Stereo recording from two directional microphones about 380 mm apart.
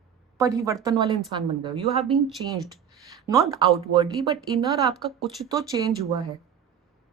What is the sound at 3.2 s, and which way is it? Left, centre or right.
A woman's voice, centre.